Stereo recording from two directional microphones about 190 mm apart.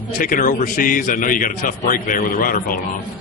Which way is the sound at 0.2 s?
45° left (ahead or behind).